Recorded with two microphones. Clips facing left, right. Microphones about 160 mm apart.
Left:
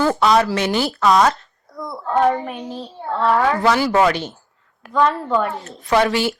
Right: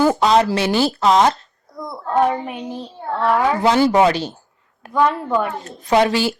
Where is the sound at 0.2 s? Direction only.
25° right (ahead or behind).